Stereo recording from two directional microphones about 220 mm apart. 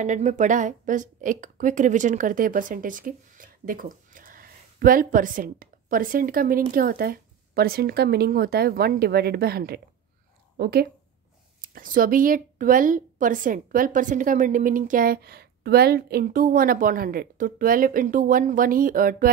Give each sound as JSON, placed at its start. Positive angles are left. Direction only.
{"t": 0.0, "sound": "a woman's voice", "side_deg": -35}